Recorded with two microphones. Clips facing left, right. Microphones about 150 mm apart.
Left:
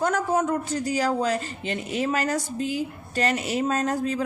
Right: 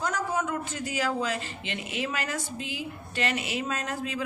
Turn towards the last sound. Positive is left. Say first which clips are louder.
# left 7 dB
turn(degrees=40)  # may be behind; listen again after turning